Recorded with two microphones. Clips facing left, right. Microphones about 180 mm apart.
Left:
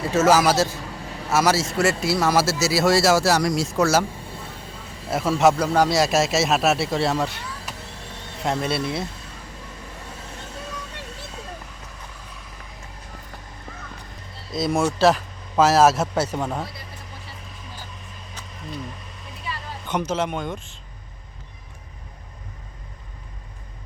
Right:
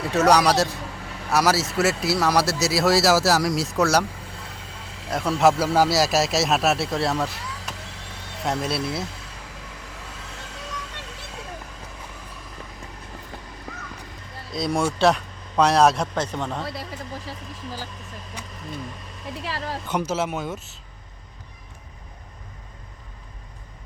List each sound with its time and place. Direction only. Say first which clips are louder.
0.0 s speech: left 1 dB; centre (ahead or behind)
5.1 s speech: left 1 dB; centre (ahead or behind)
14.5 s speech: left 2 dB; 5° left (ahead or behind)
17.2 s music: right 6 dB; 90° right
19.4 s a sound: right 4 dB; 85° right
19.9 s speech: left 1 dB; 10° right (ahead or behind)